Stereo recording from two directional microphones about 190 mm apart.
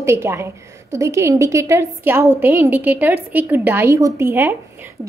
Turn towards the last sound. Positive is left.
turn(degrees=-10)  # may be behind; listen again after turning